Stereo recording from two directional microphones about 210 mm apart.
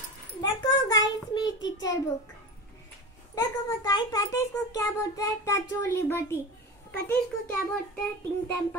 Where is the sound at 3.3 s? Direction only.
15° left (ahead or behind).